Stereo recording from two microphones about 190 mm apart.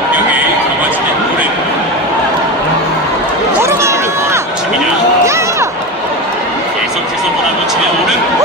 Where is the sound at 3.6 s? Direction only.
15° right (ahead or behind).